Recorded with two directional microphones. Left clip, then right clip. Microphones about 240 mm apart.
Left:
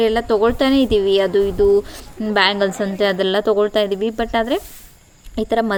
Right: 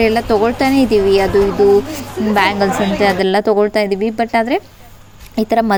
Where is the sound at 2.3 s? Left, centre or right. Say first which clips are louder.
Right 2 dB; right.